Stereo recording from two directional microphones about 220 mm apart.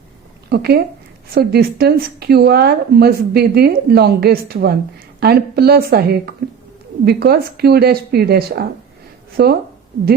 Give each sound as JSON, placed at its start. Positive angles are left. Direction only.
{"t": 0.5, "sound": "speech", "side_deg": -45}